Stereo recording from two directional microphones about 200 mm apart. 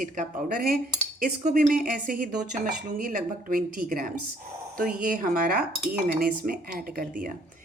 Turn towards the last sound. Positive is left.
turn(degrees=-40)  # may be behind; listen again after turning